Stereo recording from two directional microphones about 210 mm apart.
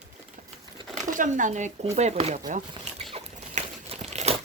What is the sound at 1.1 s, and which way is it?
Speech, 40° right (ahead or behind).